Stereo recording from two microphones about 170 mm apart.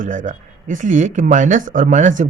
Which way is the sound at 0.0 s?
50° right (ahead or behind).